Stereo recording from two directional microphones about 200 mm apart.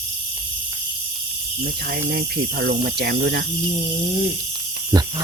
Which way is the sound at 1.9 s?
50° right (ahead or behind).